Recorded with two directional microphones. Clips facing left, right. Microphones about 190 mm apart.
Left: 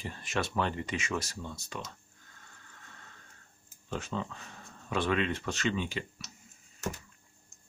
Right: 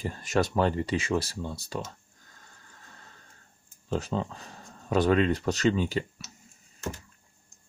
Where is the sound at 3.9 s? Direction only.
35° right (ahead or behind).